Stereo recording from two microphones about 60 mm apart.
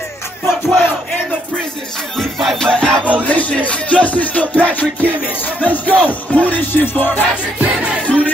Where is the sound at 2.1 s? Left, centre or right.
Centre.